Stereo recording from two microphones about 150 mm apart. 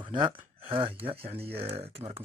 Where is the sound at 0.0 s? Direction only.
35° right (ahead or behind).